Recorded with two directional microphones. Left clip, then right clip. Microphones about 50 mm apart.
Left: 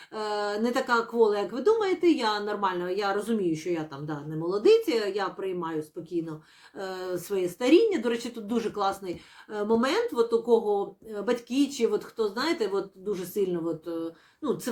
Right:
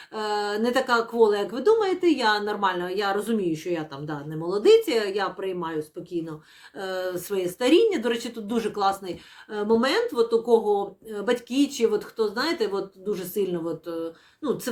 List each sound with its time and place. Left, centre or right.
0.1 s speech: right
2.3 s speech: right
4.4 s speech: right
6.7 s speech: right
9.5 s speech: right
10.5 s speech: right